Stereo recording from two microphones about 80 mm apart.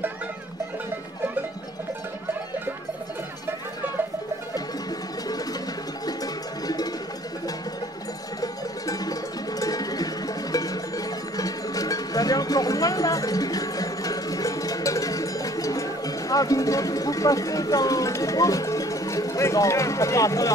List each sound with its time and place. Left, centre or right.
8.4 s music: left